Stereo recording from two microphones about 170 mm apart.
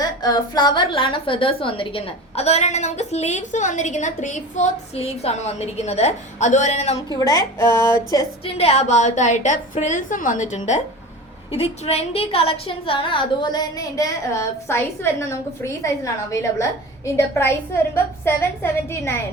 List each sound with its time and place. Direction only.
0.0 s a woman's voice: 20° left (ahead or behind); by 7.0 s 40° left (ahead or behind)
7.1 s a woman's voice: 20° left (ahead or behind)
8.4 s a woman's voice: 35° left (ahead or behind); by 19.1 s 15° left (ahead or behind)